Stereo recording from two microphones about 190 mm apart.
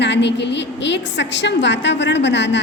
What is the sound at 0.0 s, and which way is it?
A woman's voice, 65° left (ahead or behind).